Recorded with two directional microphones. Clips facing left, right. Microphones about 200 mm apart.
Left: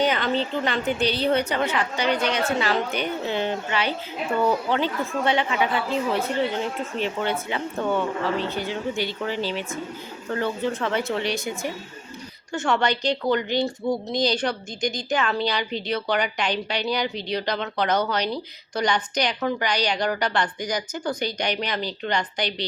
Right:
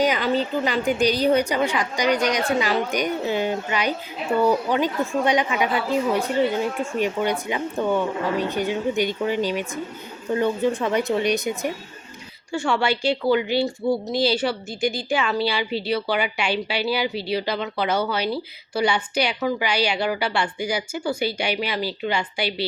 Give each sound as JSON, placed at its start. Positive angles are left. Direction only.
{"t": 0.0, "sound": "speech", "side_deg": -10}
{"t": 6.9, "sound": "speech", "side_deg": -15}
{"t": 12.5, "sound": "speech", "side_deg": -10}